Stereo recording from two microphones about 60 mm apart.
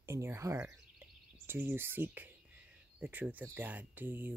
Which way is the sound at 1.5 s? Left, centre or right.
Right.